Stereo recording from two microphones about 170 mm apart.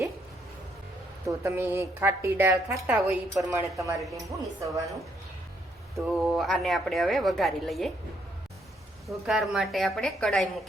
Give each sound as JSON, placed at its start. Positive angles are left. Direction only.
{"t": 1.3, "sound": "a woman's voice", "side_deg": -15}
{"t": 6.1, "sound": "a woman's voice", "side_deg": 0}
{"t": 9.0, "sound": "a woman's voice", "side_deg": 0}